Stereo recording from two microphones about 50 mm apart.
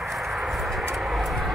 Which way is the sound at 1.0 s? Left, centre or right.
Centre.